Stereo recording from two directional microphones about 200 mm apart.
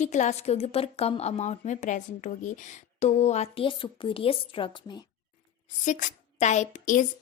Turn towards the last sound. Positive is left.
turn(degrees=40)  # may be behind; listen again after turning